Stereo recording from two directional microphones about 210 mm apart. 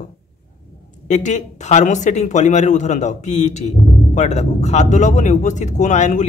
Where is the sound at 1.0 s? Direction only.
35° left (ahead or behind).